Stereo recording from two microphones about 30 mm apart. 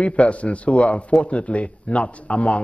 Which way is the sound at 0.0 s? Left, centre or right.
Left.